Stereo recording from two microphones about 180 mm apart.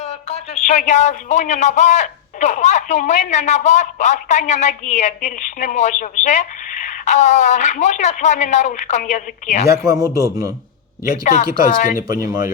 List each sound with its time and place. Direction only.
0.0 s a man's voice: 35° left (ahead or behind)
9.8 s a man's voice: 20° right (ahead or behind)
11.0 s speech: 55° left (ahead or behind)
12.0 s a man's voice: 20° right (ahead or behind)